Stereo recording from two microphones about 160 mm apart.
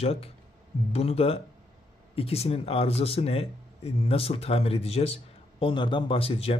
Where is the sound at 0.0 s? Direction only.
40° left (ahead or behind).